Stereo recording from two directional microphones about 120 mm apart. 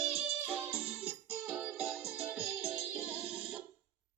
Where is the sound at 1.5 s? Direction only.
5° right (ahead or behind).